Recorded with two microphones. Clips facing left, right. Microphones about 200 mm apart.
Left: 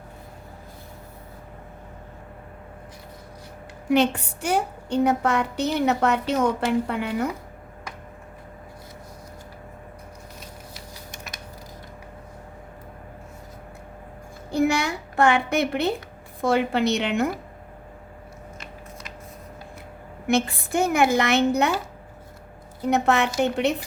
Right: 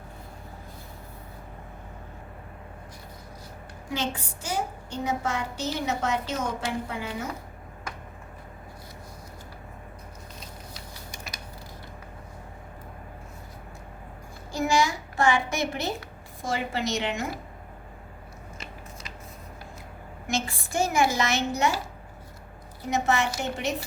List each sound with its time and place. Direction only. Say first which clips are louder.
3.8 s a woman's voice: left 11 dB; 65° left (ahead or behind)
14.5 s a sound: left 3 dB; 60° left (ahead or behind)
16.4 s a woman's voice: left 8 dB; 60° left (ahead or behind)
20.2 s a woman's voice: left 8 dB; 60° left (ahead or behind)
22.9 s a woman's voice: left 5 dB; 60° left (ahead or behind)